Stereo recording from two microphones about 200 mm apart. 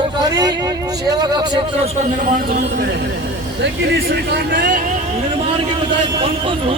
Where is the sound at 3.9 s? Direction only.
55° right (ahead or behind).